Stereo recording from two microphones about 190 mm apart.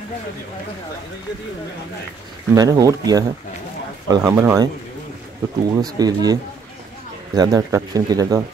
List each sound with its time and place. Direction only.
2.5 s speech: 20° right (ahead or behind)
4.3 s speech: 15° right (ahead or behind)
5.7 s speech: 20° right (ahead or behind)
7.3 s speech: 20° right (ahead or behind)